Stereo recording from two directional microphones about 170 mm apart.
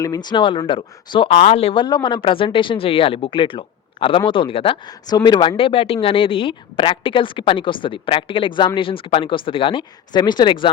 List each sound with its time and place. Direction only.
0.0 s speech: 25° left (ahead or behind)